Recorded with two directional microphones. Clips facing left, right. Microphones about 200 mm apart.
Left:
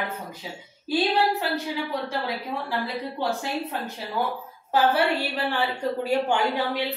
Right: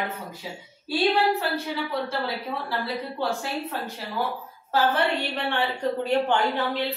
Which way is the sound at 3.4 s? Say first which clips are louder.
Left 1 dB; 20° left (ahead or behind).